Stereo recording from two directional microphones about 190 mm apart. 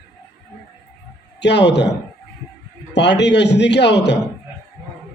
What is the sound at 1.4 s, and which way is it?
Speech, 65° left (ahead or behind).